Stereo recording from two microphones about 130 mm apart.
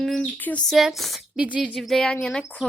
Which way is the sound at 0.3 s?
15° left (ahead or behind).